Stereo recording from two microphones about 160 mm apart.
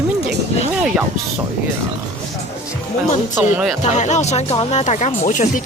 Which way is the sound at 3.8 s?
45° left (ahead or behind).